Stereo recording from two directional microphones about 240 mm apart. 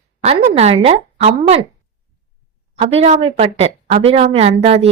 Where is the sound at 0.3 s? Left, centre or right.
Right.